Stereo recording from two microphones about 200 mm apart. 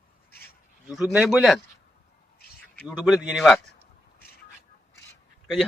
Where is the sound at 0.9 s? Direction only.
5° right (ahead or behind).